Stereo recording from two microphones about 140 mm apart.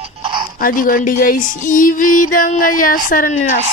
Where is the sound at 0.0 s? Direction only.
35° right (ahead or behind).